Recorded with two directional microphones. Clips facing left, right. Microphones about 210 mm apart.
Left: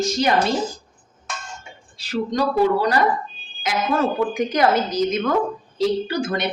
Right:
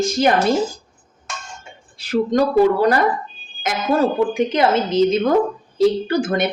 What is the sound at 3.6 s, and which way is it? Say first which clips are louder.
Speech: right 3 dB; 40° right (ahead or behind).